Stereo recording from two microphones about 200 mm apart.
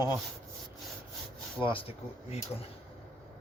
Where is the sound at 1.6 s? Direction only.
25° left (ahead or behind).